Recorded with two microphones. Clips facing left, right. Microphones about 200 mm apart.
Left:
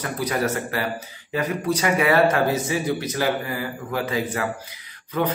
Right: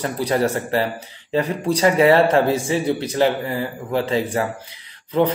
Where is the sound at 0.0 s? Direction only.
30° right (ahead or behind).